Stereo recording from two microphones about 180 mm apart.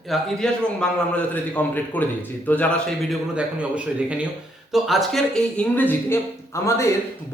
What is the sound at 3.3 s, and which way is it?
A man's voice, 5° right (ahead or behind).